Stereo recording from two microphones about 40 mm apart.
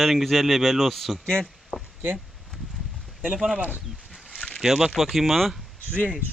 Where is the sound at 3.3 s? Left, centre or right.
Centre.